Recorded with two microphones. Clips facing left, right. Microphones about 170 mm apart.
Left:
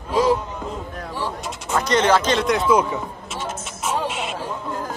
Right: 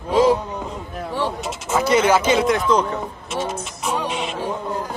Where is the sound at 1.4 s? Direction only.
5° right (ahead or behind).